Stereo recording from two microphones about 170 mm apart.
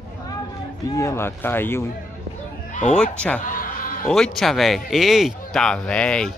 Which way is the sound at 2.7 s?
45° left (ahead or behind).